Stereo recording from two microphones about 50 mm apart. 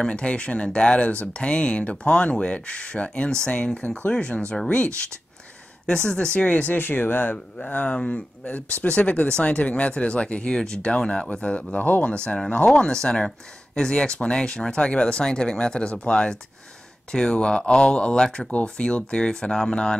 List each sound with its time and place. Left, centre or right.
0.0 s speech: centre
6.7 s speech: left
7.7 s speech: left
11.7 s speech: left
12.1 s speech: centre
12.6 s speech: centre
18.5 s speech: left
18.9 s speech: centre